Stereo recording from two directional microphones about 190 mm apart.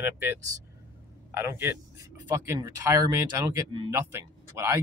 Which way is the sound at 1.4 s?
15° right (ahead or behind).